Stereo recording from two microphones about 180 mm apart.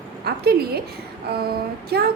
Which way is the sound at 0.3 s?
60° right (ahead or behind).